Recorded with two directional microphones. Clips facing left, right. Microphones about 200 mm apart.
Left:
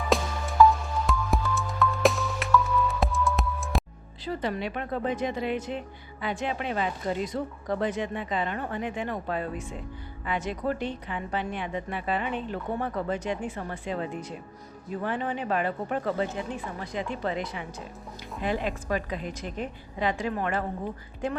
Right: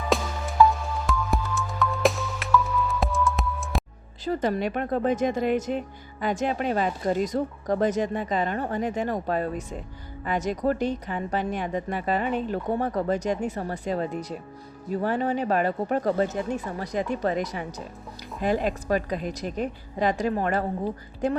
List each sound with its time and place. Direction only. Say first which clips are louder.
0.1 s music: even; centre (ahead or behind)
4.2 s a woman's voice: right 5 dB; 45° right (ahead or behind)